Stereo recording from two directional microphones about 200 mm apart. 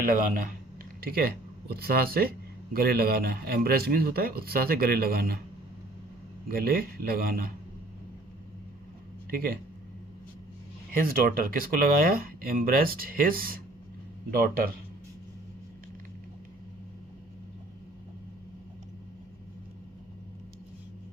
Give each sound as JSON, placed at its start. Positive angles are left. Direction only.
{"t": 0.0, "sound": "a man's voice", "side_deg": -45}
{"t": 6.5, "sound": "a man's voice", "side_deg": -45}
{"t": 11.0, "sound": "a man's voice", "side_deg": -45}